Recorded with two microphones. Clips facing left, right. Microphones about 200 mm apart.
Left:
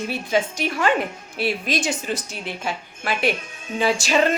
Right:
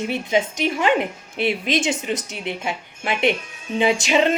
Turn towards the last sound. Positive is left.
turn(degrees=-20)  # may be behind; listen again after turning